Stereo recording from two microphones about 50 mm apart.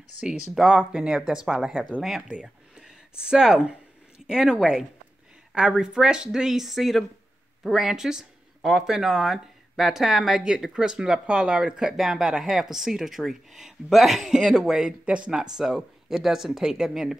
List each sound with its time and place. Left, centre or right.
0.2 s speech: centre
2.2 s a sound: right
2.8 s speech: centre
15.0 s speech: right